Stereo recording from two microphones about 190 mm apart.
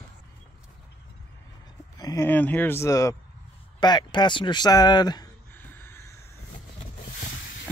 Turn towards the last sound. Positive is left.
turn(degrees=10)  # may be behind; listen again after turning